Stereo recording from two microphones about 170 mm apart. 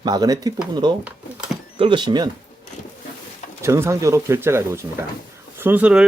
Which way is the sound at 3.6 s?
15° right (ahead or behind).